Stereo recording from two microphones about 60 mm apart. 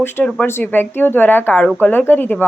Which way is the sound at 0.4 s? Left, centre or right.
Left.